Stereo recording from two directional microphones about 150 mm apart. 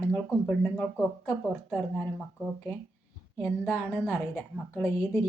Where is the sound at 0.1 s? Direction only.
10° left (ahead or behind).